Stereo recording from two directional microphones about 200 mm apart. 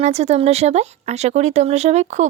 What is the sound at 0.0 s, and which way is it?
A woman's voice, 35° right (ahead or behind).